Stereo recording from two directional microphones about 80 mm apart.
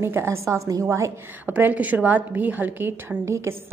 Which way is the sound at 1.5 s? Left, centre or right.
Right.